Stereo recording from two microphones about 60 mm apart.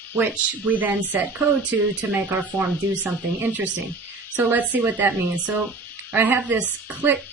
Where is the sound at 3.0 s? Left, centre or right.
Right.